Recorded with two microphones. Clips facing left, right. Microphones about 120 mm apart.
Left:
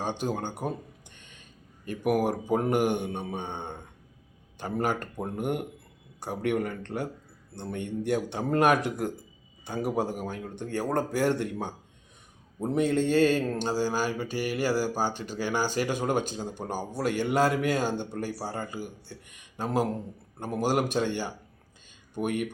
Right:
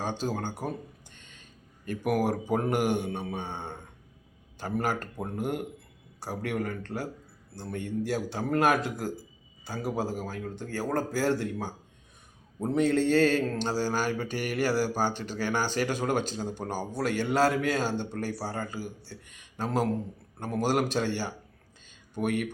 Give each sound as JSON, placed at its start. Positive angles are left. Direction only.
{"t": 0.0, "sound": "speech", "side_deg": 15}
{"t": 2.0, "sound": "a man's voice", "side_deg": 15}
{"t": 18.8, "sound": "speech", "side_deg": 55}
{"t": 19.5, "sound": "speech", "side_deg": 15}